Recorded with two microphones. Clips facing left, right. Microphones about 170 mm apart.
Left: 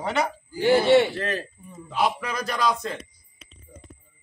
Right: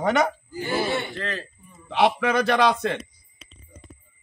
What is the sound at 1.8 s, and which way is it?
A man's voice, 80° right.